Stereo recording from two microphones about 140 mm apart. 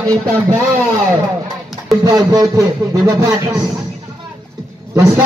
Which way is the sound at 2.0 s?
25° right (ahead or behind).